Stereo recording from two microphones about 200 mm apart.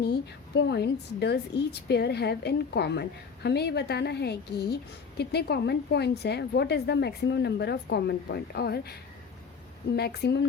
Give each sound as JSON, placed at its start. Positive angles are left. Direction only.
{"t": 0.0, "sound": "a woman's voice", "side_deg": 55}